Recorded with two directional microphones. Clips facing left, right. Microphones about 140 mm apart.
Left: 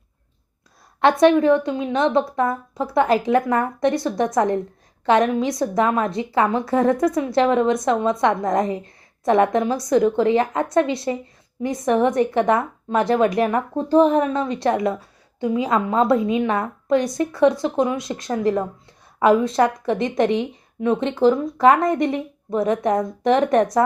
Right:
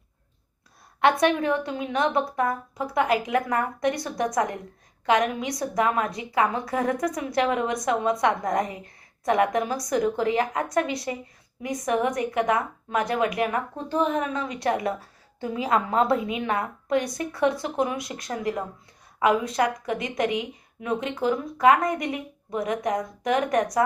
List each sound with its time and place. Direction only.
1.2 s speech: 25° left (ahead or behind)